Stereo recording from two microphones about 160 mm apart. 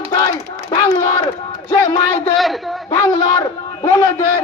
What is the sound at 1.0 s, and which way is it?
Speech, 20° left (ahead or behind).